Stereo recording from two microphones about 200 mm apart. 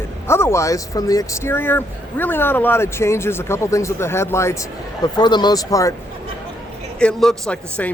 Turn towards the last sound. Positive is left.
turn(degrees=5)  # may be behind; listen again after turning